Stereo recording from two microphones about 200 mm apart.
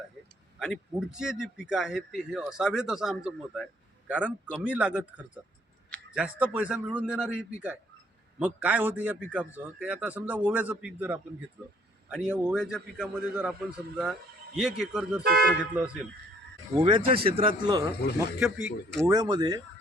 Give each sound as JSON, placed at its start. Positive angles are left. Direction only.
{"t": 0.6, "sound": "a man's voice", "side_deg": -5}
{"t": 8.4, "sound": "a man's voice", "side_deg": -10}
{"t": 15.2, "sound": "speech", "side_deg": -50}
{"t": 16.8, "sound": "a man's voice", "side_deg": -30}
{"t": 18.3, "sound": "speech", "side_deg": -5}
{"t": 19.0, "sound": "a man's voice", "side_deg": -20}